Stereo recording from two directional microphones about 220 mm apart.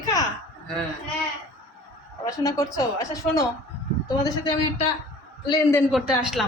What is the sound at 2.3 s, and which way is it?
A woman's voice, 15° left (ahead or behind).